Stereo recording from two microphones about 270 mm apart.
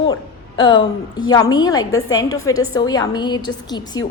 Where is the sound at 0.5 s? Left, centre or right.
Centre.